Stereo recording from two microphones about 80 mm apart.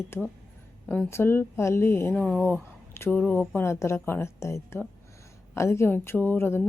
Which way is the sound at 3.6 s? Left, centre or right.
Left.